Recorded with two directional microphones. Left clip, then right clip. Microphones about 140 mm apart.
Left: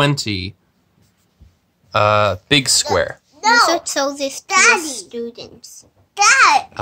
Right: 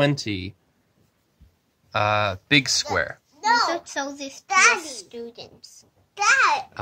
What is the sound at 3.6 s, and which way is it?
Speech, 35° left (ahead or behind).